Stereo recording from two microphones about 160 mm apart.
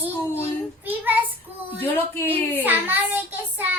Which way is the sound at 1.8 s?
15° left (ahead or behind).